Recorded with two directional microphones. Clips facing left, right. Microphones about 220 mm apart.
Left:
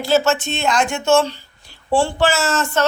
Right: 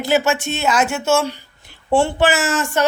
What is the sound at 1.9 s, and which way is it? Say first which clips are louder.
Speech: right 1 dB; 20° right (ahead or behind).